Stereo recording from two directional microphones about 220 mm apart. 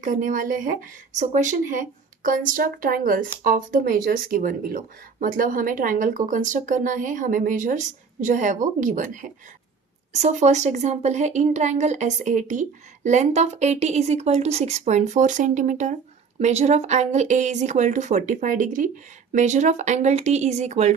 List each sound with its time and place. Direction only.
0.0 s speech: 35° right (ahead or behind)